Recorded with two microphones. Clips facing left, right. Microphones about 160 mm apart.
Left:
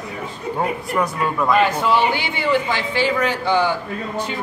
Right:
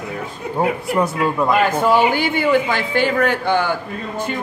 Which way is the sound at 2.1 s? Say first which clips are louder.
Right 3 dB; 45° right (ahead or behind).